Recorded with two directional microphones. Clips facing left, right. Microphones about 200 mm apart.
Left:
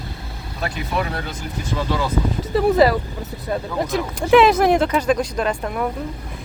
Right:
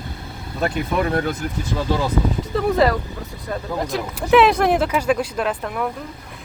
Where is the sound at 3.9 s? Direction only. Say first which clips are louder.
Left 2 dB; centre (ahead or behind).